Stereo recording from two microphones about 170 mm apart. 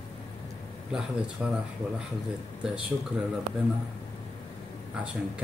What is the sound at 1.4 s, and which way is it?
Speech, 5° right (ahead or behind).